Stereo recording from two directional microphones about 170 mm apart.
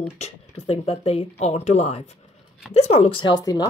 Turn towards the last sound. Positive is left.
turn(degrees=25)  # may be behind; listen again after turning